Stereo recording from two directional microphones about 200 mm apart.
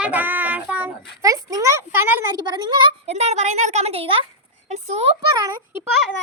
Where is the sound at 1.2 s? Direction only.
15° right (ahead or behind).